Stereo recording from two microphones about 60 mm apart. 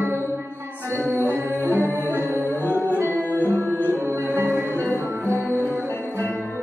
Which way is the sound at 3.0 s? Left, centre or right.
Left.